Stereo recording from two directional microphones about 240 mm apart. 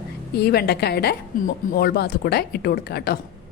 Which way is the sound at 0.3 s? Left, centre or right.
Left.